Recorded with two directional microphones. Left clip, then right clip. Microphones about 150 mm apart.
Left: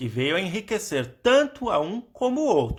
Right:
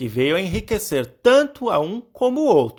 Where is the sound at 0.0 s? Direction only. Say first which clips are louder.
Right 5 dB; 40° right (ahead or behind).